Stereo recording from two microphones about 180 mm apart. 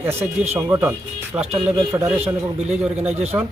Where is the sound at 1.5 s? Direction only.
30° right (ahead or behind).